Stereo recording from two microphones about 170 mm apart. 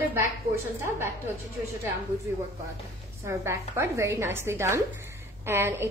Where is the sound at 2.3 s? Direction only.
15° right (ahead or behind).